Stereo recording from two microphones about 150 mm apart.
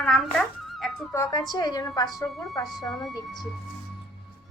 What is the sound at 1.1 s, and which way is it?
A woman's voice, 25° left (ahead or behind).